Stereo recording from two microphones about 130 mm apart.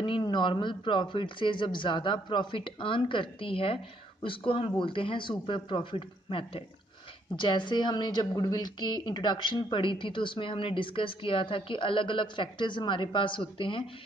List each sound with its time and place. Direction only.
0.0 s speech: 35° left (ahead or behind)